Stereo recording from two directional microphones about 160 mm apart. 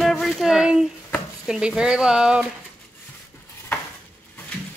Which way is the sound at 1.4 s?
5° right (ahead or behind).